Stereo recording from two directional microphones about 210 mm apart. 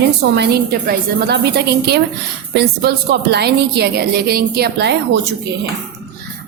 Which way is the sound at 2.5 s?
50° right (ahead or behind).